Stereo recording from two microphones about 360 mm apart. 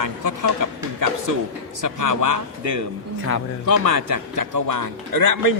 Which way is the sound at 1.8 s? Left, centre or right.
Right.